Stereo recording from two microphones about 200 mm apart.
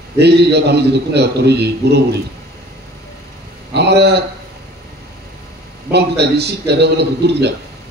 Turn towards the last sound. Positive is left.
turn(degrees=-55)  # may be behind; listen again after turning